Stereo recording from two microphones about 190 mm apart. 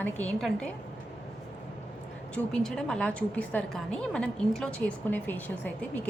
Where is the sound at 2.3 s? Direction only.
5° left (ahead or behind).